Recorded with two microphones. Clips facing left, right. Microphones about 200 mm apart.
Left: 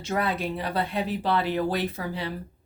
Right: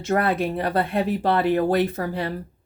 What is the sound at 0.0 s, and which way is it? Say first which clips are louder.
Speech: right 6 dB; 50° right (ahead or behind).